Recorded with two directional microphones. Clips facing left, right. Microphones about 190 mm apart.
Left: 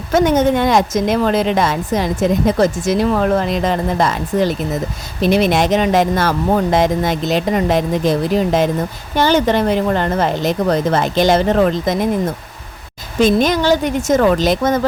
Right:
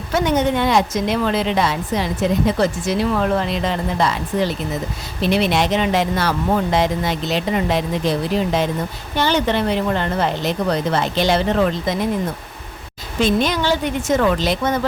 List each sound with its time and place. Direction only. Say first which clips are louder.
0.1 s a woman's voice: left 5 dB; 45° left (ahead or behind)
13.1 s a woman's voice: left 5 dB; 45° left (ahead or behind)